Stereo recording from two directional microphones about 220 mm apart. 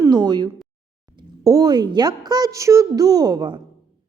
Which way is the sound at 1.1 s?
15° right (ahead or behind).